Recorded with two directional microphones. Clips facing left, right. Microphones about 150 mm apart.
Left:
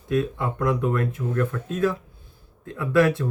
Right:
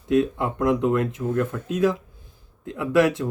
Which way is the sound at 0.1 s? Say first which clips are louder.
Right 3 dB; 20° right (ahead or behind).